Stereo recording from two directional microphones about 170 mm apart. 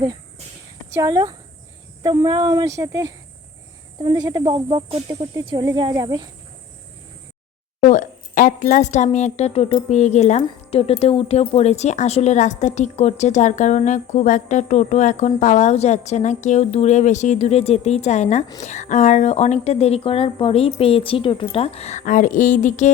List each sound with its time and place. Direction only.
0.9 s speech: 20° right (ahead or behind)
7.8 s a woman's voice: 50° left (ahead or behind)